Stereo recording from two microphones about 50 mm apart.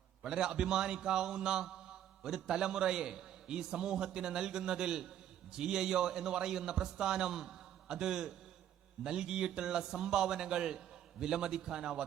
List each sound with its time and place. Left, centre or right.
0.2 s a man's voice: centre